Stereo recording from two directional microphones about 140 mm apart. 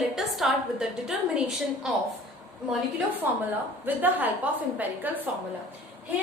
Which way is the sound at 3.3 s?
15° right (ahead or behind).